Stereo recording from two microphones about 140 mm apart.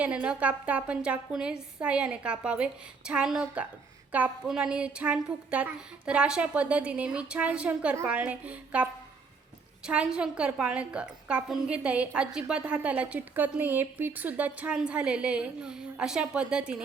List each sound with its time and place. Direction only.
0.0 s a woman's voice: 10° right (ahead or behind)